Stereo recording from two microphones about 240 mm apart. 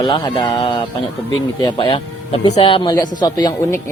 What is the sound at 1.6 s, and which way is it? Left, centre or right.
Speech, centre.